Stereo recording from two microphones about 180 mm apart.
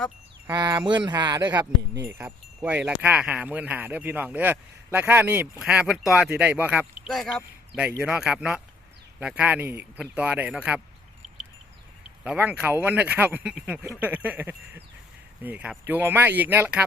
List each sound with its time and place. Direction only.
0.5 s speech: 25° right (ahead or behind)
2.0 s speech: 10° right (ahead or behind)
7.1 s speech: centre (ahead or behind)
12.2 s speech: 5° right (ahead or behind)